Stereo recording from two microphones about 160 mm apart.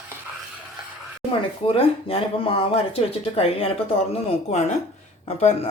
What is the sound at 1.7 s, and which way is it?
Speech, 35° left (ahead or behind).